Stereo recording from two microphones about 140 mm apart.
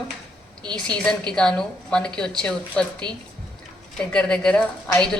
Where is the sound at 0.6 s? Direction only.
30° right (ahead or behind).